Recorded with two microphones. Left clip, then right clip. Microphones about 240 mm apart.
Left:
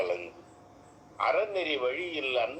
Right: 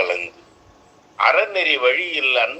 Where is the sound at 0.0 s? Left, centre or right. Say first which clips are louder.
Right 10 dB; right.